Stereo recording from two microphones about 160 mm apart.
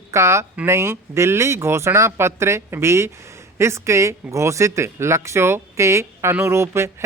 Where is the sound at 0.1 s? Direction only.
15° right (ahead or behind).